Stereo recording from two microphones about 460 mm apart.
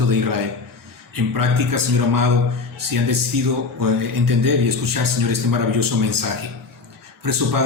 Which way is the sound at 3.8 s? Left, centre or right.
Right.